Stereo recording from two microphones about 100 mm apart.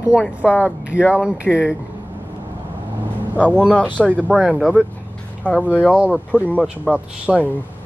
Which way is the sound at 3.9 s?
15° right (ahead or behind).